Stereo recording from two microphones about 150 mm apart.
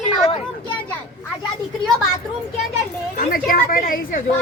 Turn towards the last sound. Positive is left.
turn(degrees=70)  # may be behind; listen again after turning